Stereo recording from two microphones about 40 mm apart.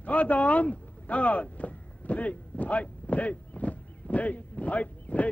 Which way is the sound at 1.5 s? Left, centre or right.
Left.